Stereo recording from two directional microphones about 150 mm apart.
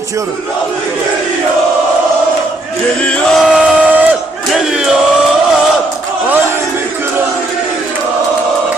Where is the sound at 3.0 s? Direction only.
5° left (ahead or behind).